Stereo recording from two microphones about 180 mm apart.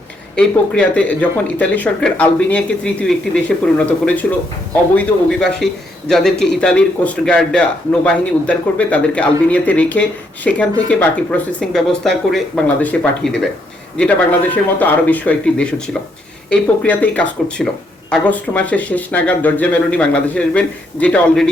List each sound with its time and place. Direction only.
0.3 s speech: 5° left (ahead or behind)
14.5 s speech: 10° left (ahead or behind)